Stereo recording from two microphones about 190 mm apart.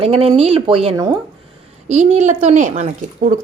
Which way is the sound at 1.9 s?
35° right (ahead or behind).